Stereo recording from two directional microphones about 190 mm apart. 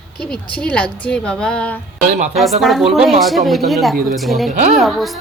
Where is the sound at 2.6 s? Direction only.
Centre (ahead or behind).